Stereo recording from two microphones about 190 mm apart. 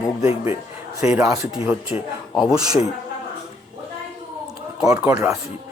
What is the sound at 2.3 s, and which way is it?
Speech, 5° right (ahead or behind).